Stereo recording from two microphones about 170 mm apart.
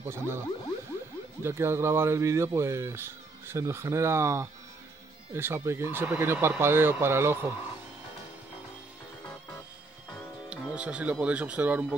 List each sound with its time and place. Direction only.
0.0 s speech: 15° right (ahead or behind)
1.4 s speech: 15° right (ahead or behind)
10.5 s speech: 5° right (ahead or behind)